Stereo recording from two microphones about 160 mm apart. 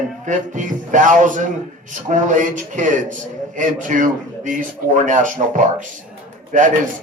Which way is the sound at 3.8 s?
55° right (ahead or behind).